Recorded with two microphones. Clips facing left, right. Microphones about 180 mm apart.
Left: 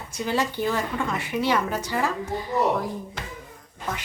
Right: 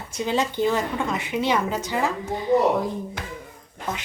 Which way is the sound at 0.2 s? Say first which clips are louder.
Right 2 dB; 20° right (ahead or behind).